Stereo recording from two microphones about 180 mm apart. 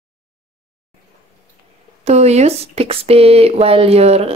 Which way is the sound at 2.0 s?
35° right (ahead or behind).